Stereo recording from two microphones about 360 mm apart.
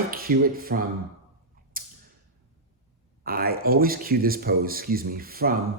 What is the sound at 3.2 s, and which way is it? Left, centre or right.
Speech, right.